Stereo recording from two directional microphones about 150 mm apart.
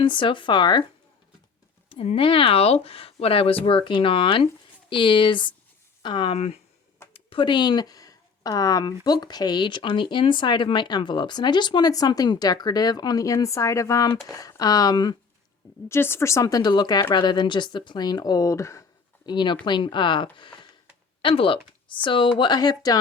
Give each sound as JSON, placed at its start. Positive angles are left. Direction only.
{"t": 0.0, "sound": "speech", "side_deg": 35}
{"t": 1.9, "sound": "speech", "side_deg": 40}
{"t": 6.3, "sound": "speech", "side_deg": 45}
{"t": 15.9, "sound": "speech", "side_deg": 15}